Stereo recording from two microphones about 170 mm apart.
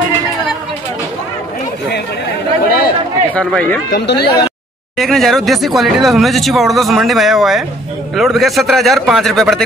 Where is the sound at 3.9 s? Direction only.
75° left (ahead or behind).